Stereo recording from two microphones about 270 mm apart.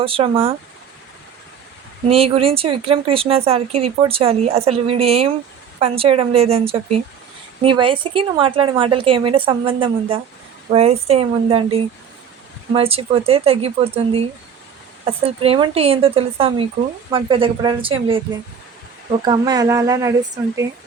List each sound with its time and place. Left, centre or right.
0.0 s speech: right
2.0 s speech: right
19.2 s speech: centre